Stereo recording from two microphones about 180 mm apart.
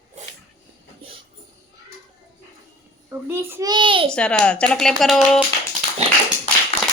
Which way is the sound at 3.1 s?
15° right (ahead or behind).